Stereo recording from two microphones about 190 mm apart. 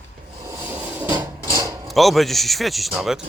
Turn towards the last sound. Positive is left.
turn(degrees=-5)  # may be behind; listen again after turning